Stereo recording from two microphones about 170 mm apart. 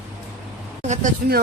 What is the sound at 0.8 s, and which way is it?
Speech, 45° right (ahead or behind).